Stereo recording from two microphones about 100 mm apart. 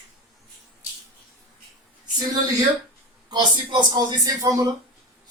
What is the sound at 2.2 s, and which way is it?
Speech, 40° right (ahead or behind).